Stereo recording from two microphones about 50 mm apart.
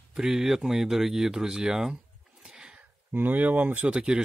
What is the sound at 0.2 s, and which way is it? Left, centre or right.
Speech, centre.